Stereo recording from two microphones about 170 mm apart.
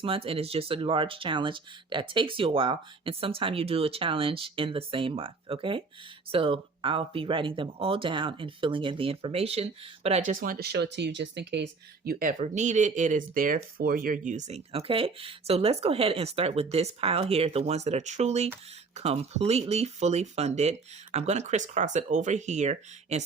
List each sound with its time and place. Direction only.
0.0 s speech: 30° right (ahead or behind); by 12.1 s 90° right
12.2 s speech: 50° right (ahead or behind)